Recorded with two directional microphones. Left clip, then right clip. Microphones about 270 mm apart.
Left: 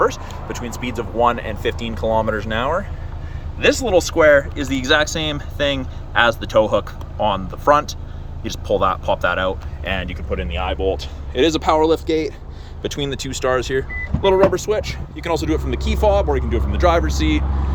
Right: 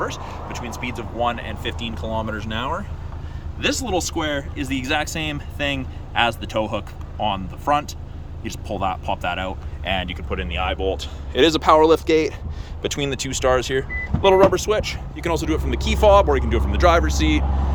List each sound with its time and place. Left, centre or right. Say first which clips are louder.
0.0 s speech: left 8 dB; centre